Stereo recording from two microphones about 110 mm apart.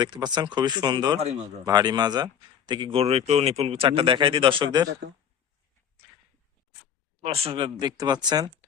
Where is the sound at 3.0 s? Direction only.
70° right (ahead or behind); by 4.7 s 50° right (ahead or behind).